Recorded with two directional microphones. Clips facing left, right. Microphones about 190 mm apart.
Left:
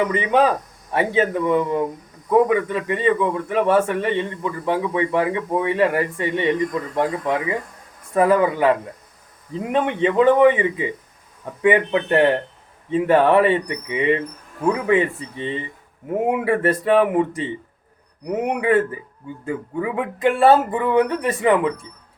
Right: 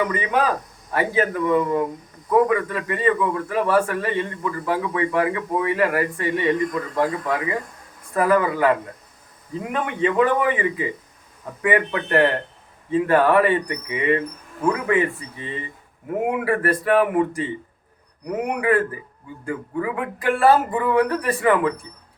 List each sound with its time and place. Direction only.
0.0 s a man's voice: 25° left (ahead or behind)